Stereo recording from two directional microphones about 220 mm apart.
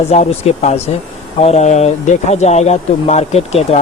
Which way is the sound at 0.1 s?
30° left (ahead or behind).